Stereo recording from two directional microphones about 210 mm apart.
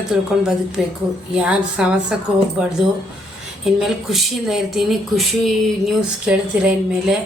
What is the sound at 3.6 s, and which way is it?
Speech, centre (ahead or behind).